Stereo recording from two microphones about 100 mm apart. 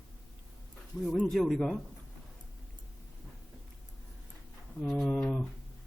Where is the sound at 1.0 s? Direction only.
5° left (ahead or behind).